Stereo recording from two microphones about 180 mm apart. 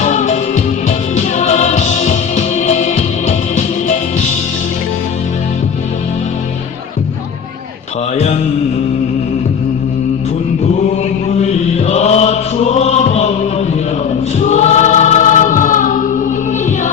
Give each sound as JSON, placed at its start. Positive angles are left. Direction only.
{"t": 0.0, "sound": "music", "side_deg": 40}
{"t": 8.1, "sound": "music", "side_deg": 35}
{"t": 11.3, "sound": "chant", "side_deg": 35}
{"t": 14.3, "sound": "choir", "side_deg": 40}